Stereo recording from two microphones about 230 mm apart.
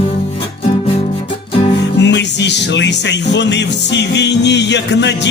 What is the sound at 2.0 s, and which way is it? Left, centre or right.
Music, left.